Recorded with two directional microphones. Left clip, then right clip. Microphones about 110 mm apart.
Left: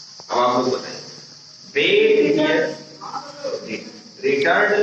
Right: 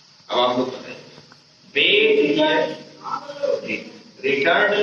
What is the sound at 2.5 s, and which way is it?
Speech, 30° right (ahead or behind).